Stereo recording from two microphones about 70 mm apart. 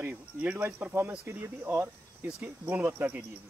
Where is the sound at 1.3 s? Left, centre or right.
Right.